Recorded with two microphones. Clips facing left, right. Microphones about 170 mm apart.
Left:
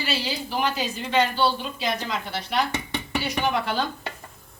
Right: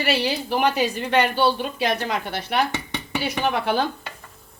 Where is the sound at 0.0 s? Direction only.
65° right (ahead or behind).